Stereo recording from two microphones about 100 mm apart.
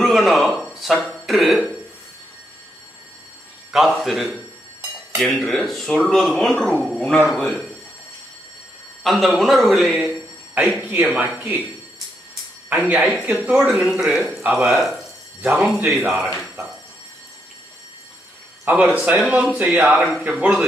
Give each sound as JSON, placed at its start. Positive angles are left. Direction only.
{"t": 0.0, "sound": "speech", "side_deg": 0}
{"t": 3.7, "sound": "speech", "side_deg": -5}
{"t": 9.0, "sound": "speech", "side_deg": 0}
{"t": 10.5, "sound": "speech", "side_deg": -15}
{"t": 12.7, "sound": "speech", "side_deg": -15}
{"t": 14.0, "sound": "speech", "side_deg": 0}
{"t": 18.6, "sound": "a man's voice", "side_deg": -15}
{"t": 20.2, "sound": "speech", "side_deg": -10}